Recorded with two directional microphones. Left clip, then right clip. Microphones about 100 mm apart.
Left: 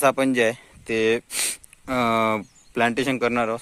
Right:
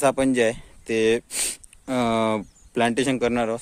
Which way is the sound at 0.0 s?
40° right (ahead or behind).